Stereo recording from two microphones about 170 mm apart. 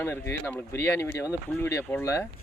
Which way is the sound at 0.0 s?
10° left (ahead or behind).